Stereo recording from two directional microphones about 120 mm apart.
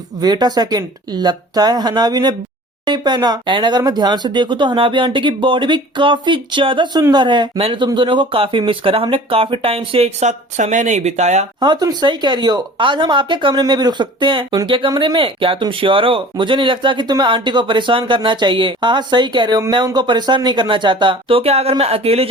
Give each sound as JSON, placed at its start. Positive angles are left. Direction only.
{"t": 0.2, "sound": "speech", "side_deg": -35}
{"t": 11.6, "sound": "speech", "side_deg": -35}